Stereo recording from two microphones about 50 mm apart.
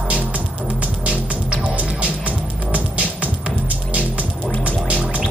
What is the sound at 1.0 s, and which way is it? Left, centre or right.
Music, right.